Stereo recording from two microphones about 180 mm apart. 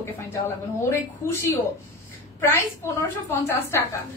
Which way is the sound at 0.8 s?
15° left (ahead or behind).